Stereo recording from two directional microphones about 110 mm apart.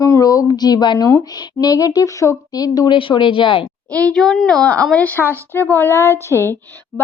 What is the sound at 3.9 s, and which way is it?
A woman's voice, 10° left (ahead or behind).